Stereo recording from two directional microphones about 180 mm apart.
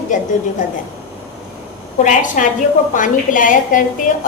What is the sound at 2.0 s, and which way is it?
A woman's voice, 45° left (ahead or behind).